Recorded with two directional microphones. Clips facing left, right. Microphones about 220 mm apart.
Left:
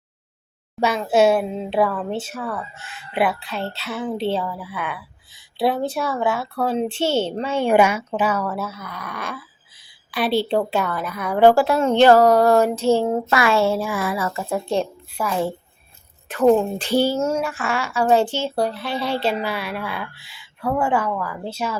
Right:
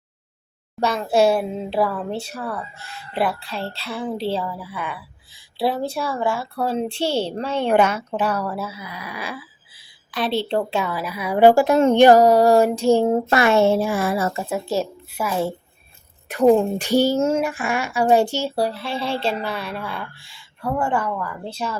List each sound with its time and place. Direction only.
0.9 s a woman's voice: 5° left (ahead or behind)
10.5 s a woman's voice: 5° left (ahead or behind); by 14.4 s 25° right (ahead or behind)
14.5 s a woman's voice: 5° right (ahead or behind)
18.3 s speech: 40° right (ahead or behind)
18.9 s a woman's voice: 25° right (ahead or behind)
19.2 s speech: 5° left (ahead or behind)